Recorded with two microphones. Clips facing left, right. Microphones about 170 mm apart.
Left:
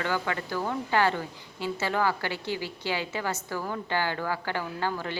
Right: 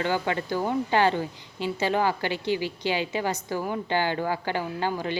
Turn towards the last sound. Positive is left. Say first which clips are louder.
# right 3 dB
turn(degrees=-20)  # may be behind; listen again after turning